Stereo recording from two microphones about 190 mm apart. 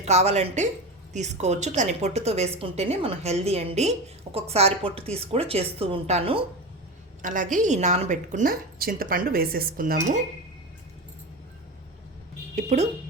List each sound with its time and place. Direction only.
0.0 s a woman's voice: 35° right (ahead or behind)
7.2 s a woman's voice: 45° right (ahead or behind)
12.5 s a woman's voice: 35° right (ahead or behind)